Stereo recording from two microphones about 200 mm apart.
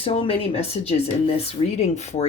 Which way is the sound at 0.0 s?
30° left (ahead or behind).